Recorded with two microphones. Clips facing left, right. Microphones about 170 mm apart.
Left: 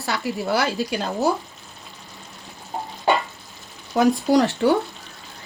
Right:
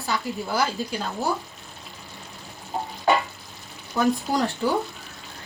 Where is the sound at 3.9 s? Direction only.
85° left.